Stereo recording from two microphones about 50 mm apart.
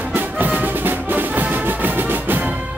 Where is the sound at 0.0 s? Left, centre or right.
Right.